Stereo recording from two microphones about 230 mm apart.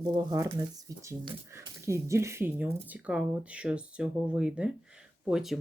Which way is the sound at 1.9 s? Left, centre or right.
Centre.